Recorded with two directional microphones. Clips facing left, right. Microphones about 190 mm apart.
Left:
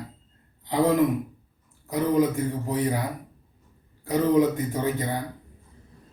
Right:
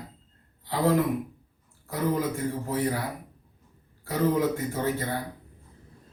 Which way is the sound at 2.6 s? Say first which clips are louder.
Left 1 dB; 15° left (ahead or behind).